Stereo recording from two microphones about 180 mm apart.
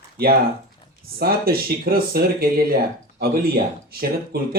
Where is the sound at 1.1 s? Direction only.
55° right (ahead or behind).